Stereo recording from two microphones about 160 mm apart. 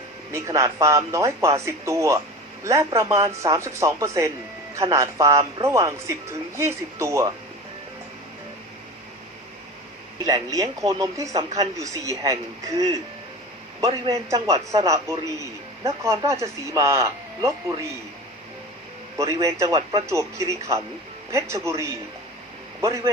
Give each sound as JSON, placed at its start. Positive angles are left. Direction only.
{"t": 0.3, "sound": "speech", "side_deg": -20}
{"t": 10.2, "sound": "speech", "side_deg": -20}
{"t": 19.1, "sound": "a man's voice", "side_deg": -20}